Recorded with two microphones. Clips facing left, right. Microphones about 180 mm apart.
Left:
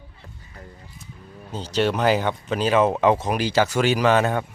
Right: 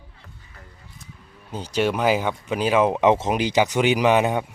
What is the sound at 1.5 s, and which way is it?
Speech, 10° right (ahead or behind).